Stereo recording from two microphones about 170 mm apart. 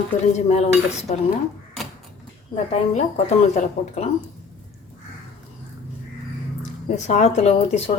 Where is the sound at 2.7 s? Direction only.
40° left (ahead or behind).